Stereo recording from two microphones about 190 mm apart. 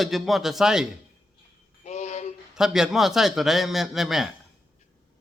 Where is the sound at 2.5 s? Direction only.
5° right (ahead or behind).